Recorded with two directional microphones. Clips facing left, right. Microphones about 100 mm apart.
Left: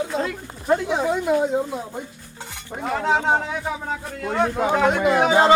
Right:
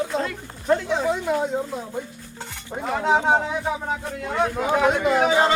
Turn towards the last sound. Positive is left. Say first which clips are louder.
# left 1 dB
turn(degrees=5)  # may be behind; listen again after turning